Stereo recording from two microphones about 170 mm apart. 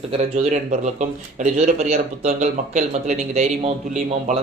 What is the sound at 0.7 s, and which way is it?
Speech, 45° right (ahead or behind).